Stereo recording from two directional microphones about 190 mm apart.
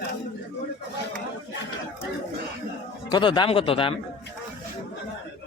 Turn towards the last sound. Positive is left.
turn(degrees=30)  # may be behind; listen again after turning